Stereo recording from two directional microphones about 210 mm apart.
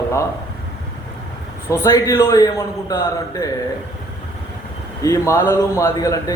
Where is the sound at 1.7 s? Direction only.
15° left (ahead or behind).